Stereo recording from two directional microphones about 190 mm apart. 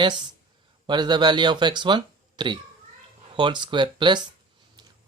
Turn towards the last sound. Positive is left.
turn(degrees=-20)  # may be behind; listen again after turning